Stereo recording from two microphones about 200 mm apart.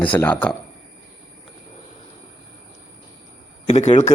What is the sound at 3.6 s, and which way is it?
Speech, 35° left (ahead or behind).